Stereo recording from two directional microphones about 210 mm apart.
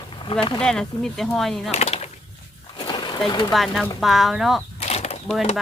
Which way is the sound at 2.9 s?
20° left (ahead or behind).